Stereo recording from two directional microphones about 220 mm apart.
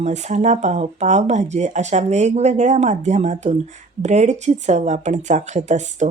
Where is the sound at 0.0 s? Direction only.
30° right (ahead or behind).